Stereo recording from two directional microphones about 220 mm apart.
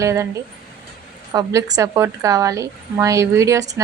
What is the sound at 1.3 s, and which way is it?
Speech, 15° right (ahead or behind).